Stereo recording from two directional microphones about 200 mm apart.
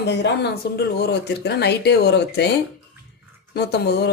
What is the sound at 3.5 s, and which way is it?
Speech, 55° left (ahead or behind).